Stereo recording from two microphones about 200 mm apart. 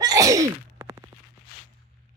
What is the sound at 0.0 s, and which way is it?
Sneeze, 15° right (ahead or behind).